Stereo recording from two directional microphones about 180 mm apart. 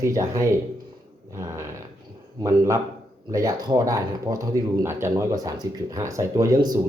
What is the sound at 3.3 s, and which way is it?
Speech, 20° right (ahead or behind).